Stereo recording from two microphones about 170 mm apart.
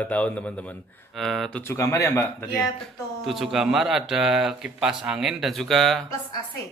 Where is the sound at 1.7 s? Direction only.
15° left (ahead or behind).